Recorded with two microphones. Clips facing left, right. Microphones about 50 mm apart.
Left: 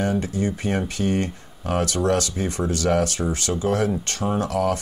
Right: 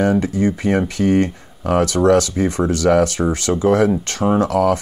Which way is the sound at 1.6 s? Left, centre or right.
Right.